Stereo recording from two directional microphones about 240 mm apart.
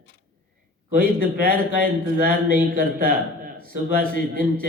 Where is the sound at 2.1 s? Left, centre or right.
Right.